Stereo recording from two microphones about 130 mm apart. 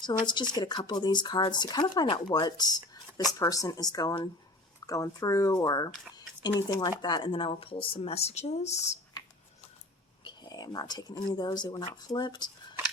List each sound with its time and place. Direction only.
0.0 s speech: 35° left (ahead or behind); by 9.0 s 60° left (ahead or behind)
10.2 s speech: 30° left (ahead or behind)